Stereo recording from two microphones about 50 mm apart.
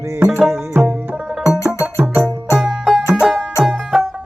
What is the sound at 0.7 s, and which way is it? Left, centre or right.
Tabla, right.